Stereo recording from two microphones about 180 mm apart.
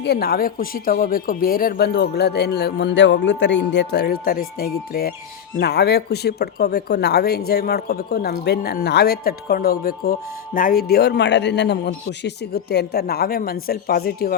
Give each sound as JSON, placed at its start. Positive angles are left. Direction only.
{"t": 0.0, "sound": "speech", "side_deg": 60}